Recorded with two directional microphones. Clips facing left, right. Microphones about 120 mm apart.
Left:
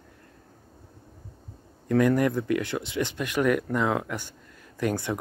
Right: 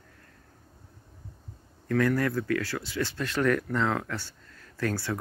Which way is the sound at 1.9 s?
20° left (ahead or behind).